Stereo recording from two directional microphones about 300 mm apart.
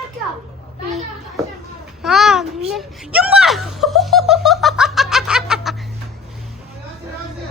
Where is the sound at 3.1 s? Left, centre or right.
Centre.